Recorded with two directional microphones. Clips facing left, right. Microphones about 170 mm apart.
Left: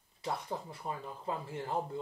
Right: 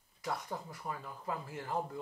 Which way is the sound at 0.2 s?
25° left (ahead or behind).